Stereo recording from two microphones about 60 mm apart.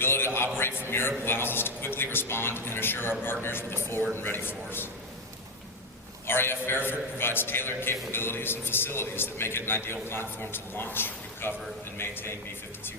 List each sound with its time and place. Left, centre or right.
0.0 s a sound: left
0.5 s a man's voice: left
6.2 s a man's voice: left